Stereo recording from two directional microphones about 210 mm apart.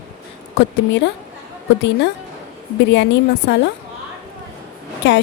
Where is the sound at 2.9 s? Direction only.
55° left (ahead or behind).